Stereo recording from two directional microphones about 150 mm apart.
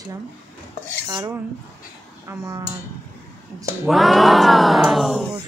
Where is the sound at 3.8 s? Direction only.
Centre (ahead or behind).